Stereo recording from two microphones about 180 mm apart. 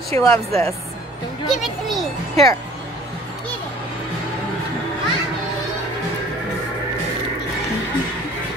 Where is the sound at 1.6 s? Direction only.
Centre (ahead or behind).